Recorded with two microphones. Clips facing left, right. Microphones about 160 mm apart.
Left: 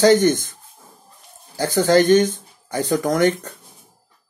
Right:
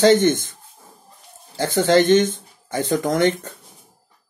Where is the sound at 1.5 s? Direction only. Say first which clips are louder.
Left 1 dB; 25° right (ahead or behind).